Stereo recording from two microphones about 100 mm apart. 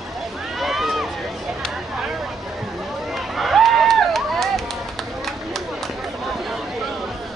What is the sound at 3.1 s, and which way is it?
Run, centre (ahead or behind).